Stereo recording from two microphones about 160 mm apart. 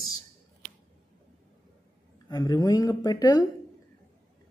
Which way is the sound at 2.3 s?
25° left (ahead or behind).